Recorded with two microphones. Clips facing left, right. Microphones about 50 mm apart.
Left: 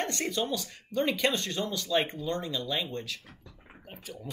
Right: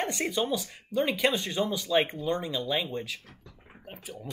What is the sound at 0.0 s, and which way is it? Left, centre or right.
Speech, centre.